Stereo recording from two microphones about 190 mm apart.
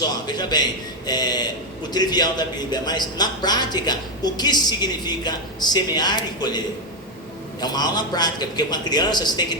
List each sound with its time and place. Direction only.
0.3 s a man's voice: 20° left (ahead or behind)
7.6 s speech: 20° left (ahead or behind)